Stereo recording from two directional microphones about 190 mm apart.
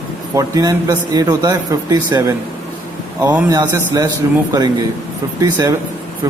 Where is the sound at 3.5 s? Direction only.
20° right (ahead or behind).